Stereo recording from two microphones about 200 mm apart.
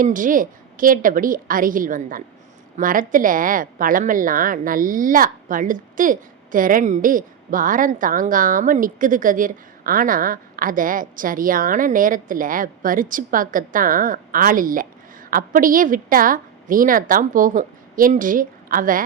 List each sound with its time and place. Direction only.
0.0 s a woman's voice: 40° right (ahead or behind)